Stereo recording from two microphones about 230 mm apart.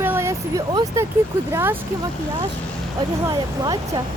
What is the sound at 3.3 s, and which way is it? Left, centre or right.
Speech, centre.